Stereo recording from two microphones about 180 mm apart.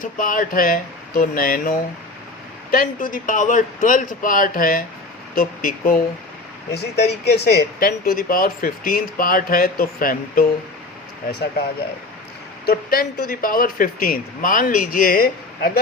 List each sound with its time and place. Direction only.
0.0 s speech: 50° left (ahead or behind)
6.7 s speech: 65° left (ahead or behind)
12.6 s speech: 55° left (ahead or behind)